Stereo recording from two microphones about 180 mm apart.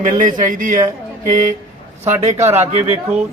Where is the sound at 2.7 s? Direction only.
35° right (ahead or behind).